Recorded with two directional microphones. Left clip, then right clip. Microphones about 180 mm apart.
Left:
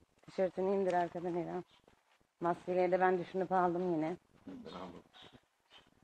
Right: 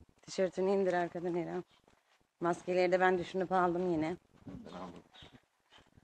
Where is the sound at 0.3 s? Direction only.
15° right (ahead or behind).